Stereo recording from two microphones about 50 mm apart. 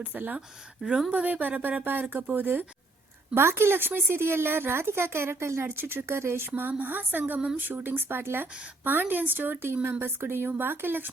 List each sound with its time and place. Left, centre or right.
0.0 s a woman's voice: right
3.3 s speech: right
5.6 s speech: right
6.6 s a woman's voice: right
7.3 s a woman's voice: right